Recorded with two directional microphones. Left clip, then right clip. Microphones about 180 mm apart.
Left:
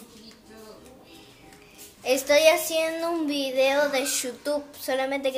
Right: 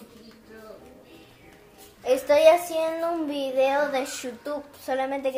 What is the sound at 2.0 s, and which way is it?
Speech, 5° left (ahead or behind).